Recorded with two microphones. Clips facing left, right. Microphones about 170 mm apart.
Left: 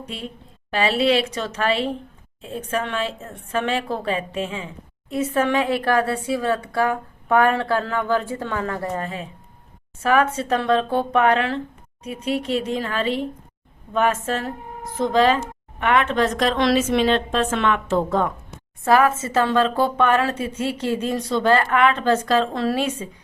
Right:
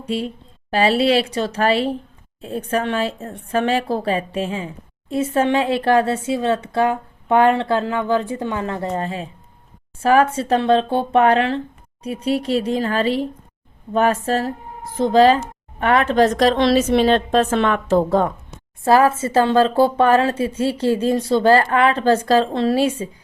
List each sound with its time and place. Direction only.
0.7 s a woman's voice: 35° right (ahead or behind)